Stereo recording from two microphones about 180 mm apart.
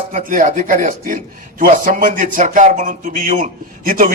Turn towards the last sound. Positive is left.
turn(degrees=-50)  # may be behind; listen again after turning